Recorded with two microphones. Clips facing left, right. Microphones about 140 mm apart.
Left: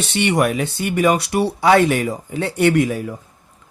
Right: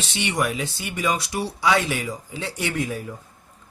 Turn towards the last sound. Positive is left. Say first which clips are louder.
# left 10 dB
turn(degrees=80)